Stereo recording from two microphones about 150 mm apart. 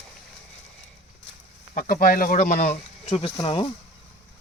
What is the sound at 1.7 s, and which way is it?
Speech, 65° left (ahead or behind).